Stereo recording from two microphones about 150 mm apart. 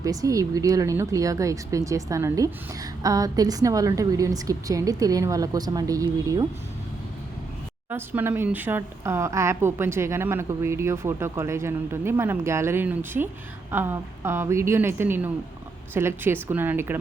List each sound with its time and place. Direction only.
0.0 s a woman's voice: 25° right (ahead or behind)
7.9 s speech: 15° right (ahead or behind)